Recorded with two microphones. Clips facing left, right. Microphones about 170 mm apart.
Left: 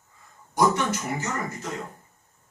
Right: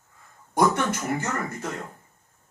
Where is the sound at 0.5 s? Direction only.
55° right (ahead or behind).